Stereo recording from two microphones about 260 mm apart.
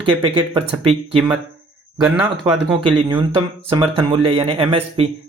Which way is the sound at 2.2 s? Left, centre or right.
Centre.